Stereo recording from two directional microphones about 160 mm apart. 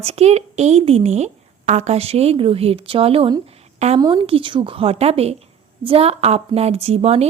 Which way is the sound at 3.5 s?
40° right (ahead or behind).